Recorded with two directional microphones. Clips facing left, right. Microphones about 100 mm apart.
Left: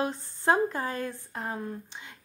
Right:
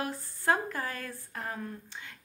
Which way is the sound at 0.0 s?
25° left (ahead or behind).